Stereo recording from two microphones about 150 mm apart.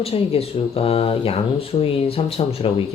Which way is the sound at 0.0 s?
40° left (ahead or behind).